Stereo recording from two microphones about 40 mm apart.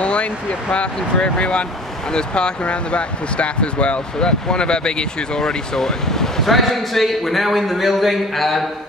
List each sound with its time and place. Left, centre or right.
0.0 s speech: left; by 8.6 s centre